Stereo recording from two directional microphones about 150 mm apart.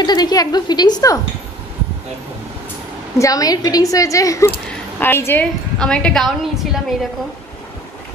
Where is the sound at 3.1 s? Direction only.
20° left (ahead or behind); by 6.7 s 5° left (ahead or behind).